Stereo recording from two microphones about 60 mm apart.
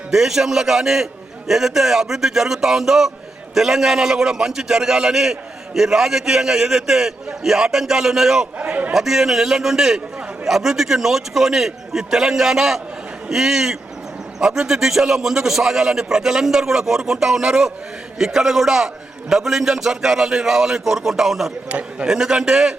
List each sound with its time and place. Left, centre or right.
0.1 s a man's voice: centre
8.5 s a man's voice: right
8.9 s a man's voice: centre
21.7 s speech: right
22.0 s a man's voice: centre